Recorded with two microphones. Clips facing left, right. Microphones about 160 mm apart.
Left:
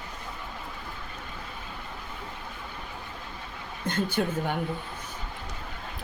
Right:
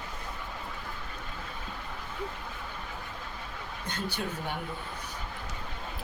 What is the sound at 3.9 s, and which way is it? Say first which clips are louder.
Speech: left 9 dB; 50° left (ahead or behind).